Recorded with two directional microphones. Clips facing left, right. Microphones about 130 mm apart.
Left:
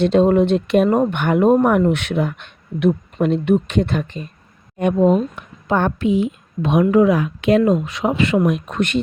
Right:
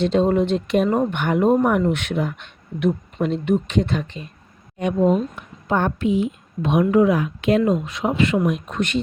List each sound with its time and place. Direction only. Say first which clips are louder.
0.0 s speech: left 4 dB; 60° left (ahead or behind); by 4.3 s 45° left (ahead or behind)
5.6 s a woman's voice: left 2 dB; 90° left
8.4 s speech: left 3 dB; 65° left (ahead or behind)